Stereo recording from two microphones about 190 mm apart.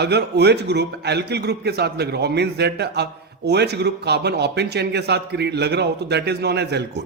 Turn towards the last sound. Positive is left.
turn(degrees=-60)  # may be behind; listen again after turning